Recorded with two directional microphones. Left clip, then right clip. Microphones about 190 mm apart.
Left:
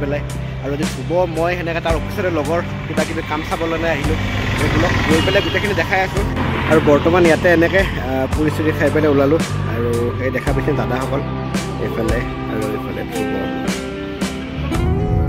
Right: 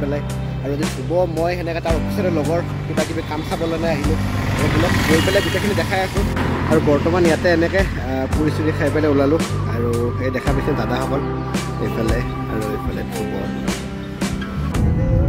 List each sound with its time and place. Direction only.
0.7 s speech: centre (ahead or behind)
4.6 s speech: 35° left (ahead or behind)
5.1 s speech: centre (ahead or behind)